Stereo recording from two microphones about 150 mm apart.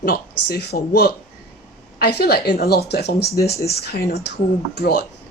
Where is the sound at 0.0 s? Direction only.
85° left.